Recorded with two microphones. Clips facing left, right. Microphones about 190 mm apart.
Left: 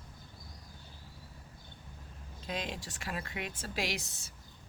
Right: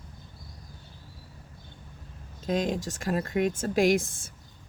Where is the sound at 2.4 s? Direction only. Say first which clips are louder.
Right 11 dB; 45° right (ahead or behind).